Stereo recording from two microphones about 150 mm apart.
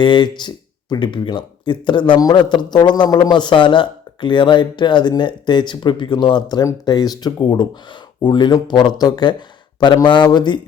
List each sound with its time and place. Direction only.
0.0 s speech: 30° left (ahead or behind)